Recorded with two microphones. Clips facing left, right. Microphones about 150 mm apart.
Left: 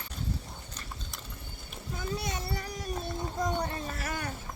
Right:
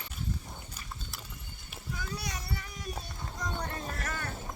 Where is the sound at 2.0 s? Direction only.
25° left (ahead or behind).